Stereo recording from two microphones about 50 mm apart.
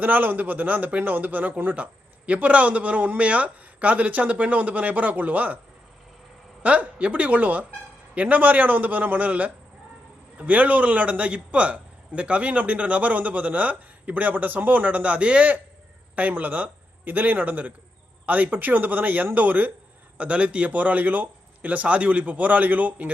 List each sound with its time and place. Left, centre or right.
0.0 s a man's voice: right
6.6 s a man's voice: right
20.1 s a man's voice: right